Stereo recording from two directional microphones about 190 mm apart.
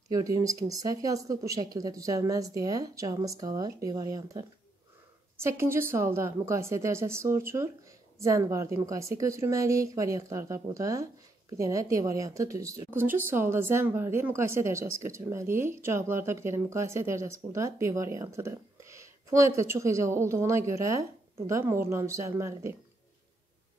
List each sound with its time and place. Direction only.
0.1 s speech: 20° right (ahead or behind)